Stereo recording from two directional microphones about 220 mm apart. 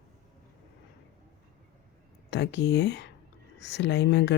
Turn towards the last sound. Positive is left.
turn(degrees=50)  # may be behind; listen again after turning